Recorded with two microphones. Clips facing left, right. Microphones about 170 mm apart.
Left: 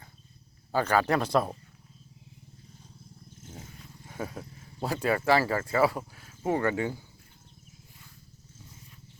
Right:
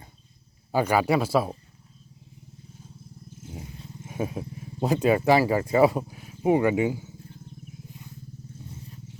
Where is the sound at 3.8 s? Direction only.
20° right (ahead or behind).